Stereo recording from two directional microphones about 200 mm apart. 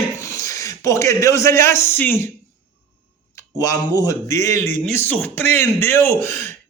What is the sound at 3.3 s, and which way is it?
Speech, 15° left (ahead or behind).